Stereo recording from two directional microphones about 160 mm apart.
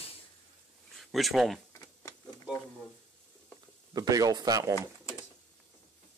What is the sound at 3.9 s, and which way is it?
Speech, 25° right (ahead or behind).